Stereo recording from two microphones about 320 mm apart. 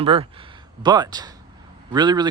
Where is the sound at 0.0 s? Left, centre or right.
Centre.